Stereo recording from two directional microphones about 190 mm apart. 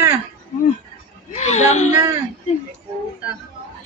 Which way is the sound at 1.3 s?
35° left (ahead or behind).